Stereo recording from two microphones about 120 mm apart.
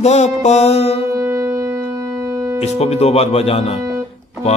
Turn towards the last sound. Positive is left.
turn(degrees=60)  # may be behind; listen again after turning